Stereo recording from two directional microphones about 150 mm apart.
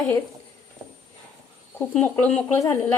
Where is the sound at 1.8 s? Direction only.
10° left (ahead or behind).